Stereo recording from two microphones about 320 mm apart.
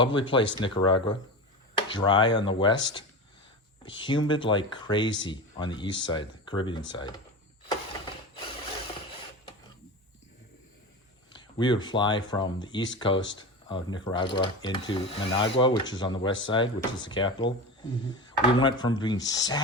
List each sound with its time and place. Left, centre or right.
0.0 s speech: centre
8.0 s ratchet: centre
11.3 s speech: centre